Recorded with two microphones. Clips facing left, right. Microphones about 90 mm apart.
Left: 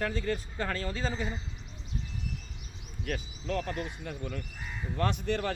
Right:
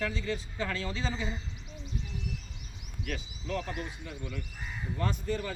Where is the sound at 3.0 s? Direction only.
45° left (ahead or behind).